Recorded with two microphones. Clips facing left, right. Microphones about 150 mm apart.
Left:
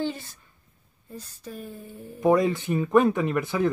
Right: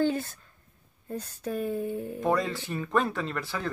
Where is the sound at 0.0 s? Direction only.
55° right (ahead or behind).